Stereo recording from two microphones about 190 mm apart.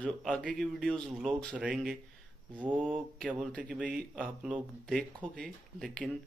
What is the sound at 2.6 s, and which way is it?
Mantra, 10° right (ahead or behind).